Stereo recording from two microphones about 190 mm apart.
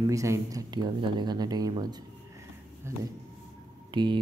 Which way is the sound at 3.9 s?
25° right (ahead or behind).